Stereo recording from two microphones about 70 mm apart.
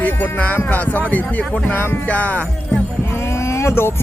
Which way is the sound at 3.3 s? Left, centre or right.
Left.